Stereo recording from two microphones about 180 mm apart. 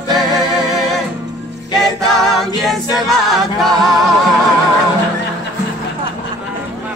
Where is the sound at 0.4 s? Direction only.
Centre (ahead or behind).